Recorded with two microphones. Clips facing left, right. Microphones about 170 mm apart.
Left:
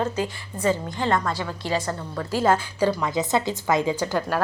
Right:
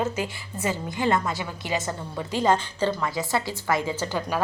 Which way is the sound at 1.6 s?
20° right (ahead or behind).